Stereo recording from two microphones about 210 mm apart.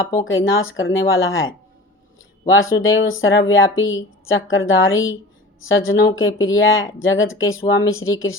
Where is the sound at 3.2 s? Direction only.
70° left (ahead or behind).